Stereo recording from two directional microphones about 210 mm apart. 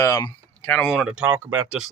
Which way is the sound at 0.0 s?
15° left (ahead or behind).